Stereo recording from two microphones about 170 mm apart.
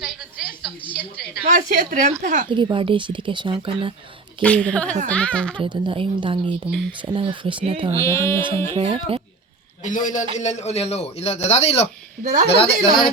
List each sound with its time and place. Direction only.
0.0 s a sound: 5° right (ahead or behind)
1.5 s a woman's voice: 45° right (ahead or behind)
2.5 s speech: 30° right (ahead or behind)
4.4 s a woman's voice: 5° left (ahead or behind)
5.5 s speech: 25° right (ahead or behind)
6.7 s speech: centre (ahead or behind)
7.0 s speech: 30° right (ahead or behind)
7.9 s a woman's voice: 15° left (ahead or behind)
8.7 s speech: 30° right (ahead or behind)
9.8 s a man's voice: 50° left (ahead or behind)
12.2 s a woman's voice: 50° right (ahead or behind)